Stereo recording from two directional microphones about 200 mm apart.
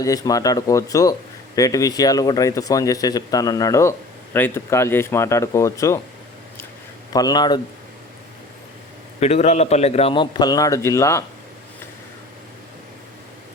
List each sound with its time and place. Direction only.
0.0 s speech: 20° left (ahead or behind)
7.1 s a man's voice: 20° left (ahead or behind)
9.2 s a man's voice: 35° left (ahead or behind); by 11.2 s 15° left (ahead or behind)